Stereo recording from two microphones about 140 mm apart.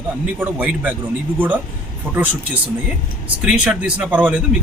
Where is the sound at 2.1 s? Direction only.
15° right (ahead or behind).